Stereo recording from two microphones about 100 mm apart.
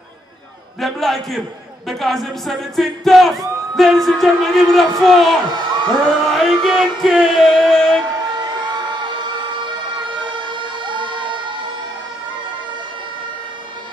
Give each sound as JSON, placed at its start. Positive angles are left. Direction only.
{"t": 0.7, "sound": "speech", "side_deg": 0}
{"t": 5.5, "sound": "a sound", "side_deg": -50}
{"t": 6.0, "sound": "speech", "side_deg": 0}
{"t": 10.0, "sound": "emergency vehicle", "side_deg": -55}